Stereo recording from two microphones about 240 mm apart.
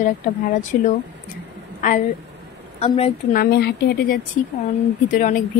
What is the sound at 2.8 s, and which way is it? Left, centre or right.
Speech, left.